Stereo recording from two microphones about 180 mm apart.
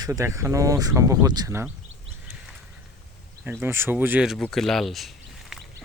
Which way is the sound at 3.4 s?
10° right (ahead or behind).